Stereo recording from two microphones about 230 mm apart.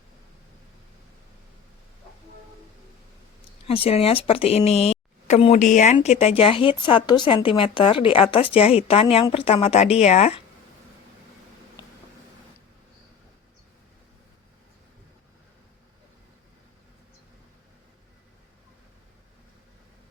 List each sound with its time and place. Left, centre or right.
3.7 s speech: left